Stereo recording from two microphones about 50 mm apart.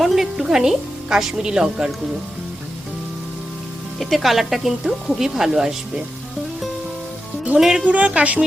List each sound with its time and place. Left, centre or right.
0.0 s a woman's voice: centre
4.0 s speech: centre
7.6 s speech: centre
7.9 s speech: right